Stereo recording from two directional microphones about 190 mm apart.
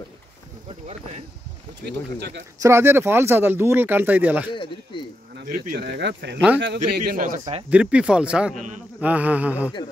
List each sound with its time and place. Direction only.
0.7 s a sound: 35° right (ahead or behind)
1.9 s speech: 65° right (ahead or behind)
2.6 s speech: 15° right (ahead or behind)
4.5 s speech: 25° left (ahead or behind)
5.4 s speech: 45° right (ahead or behind); by 7.0 s 65° right (ahead or behind)
7.0 s a man's voice: 45° right (ahead or behind)
7.7 s speech: 5° right (ahead or behind)